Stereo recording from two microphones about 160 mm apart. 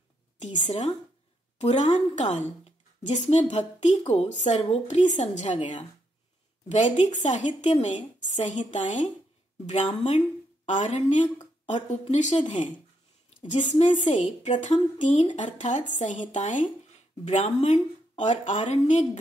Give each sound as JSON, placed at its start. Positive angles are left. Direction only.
{"t": 0.7, "sound": "a woman's voice", "side_deg": 45}
{"t": 7.0, "sound": "a woman's voice", "side_deg": 45}